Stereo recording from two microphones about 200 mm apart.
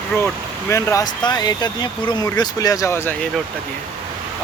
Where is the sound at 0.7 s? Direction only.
15° left (ahead or behind).